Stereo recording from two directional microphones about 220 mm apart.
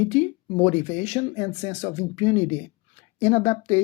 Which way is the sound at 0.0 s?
30° left (ahead or behind).